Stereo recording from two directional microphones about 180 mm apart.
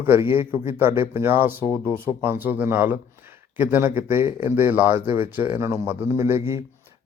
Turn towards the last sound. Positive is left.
turn(degrees=-15)  # may be behind; listen again after turning